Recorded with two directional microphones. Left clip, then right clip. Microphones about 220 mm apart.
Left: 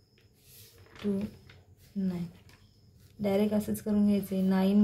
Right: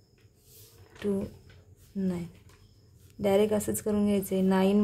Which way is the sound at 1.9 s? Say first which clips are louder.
Right 2 dB; 45° right (ahead or behind).